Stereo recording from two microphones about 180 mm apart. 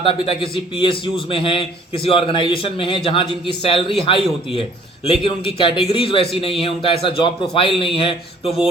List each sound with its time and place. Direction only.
0.0 s a man's voice: 30° left (ahead or behind)